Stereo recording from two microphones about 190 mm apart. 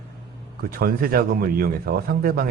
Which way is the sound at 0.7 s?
50° right (ahead or behind).